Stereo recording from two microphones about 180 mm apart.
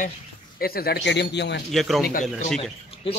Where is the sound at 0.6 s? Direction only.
60° left (ahead or behind).